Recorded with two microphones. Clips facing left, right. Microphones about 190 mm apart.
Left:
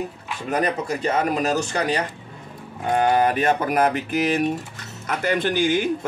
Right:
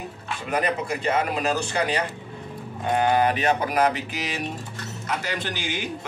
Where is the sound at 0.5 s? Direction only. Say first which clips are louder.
Left 2 dB; 40° left (ahead or behind).